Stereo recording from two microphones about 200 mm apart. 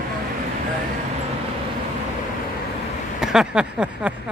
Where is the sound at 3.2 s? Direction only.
5° right (ahead or behind).